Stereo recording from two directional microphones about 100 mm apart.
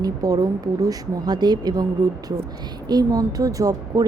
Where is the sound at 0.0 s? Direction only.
35° right (ahead or behind).